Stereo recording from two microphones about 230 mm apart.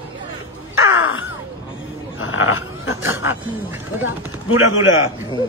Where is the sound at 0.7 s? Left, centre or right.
Left.